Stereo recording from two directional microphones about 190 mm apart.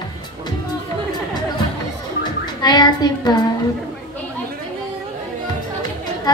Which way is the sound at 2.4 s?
20° left (ahead or behind).